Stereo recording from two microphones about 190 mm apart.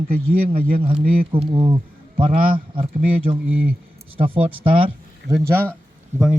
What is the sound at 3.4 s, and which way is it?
Speech, 10° right (ahead or behind).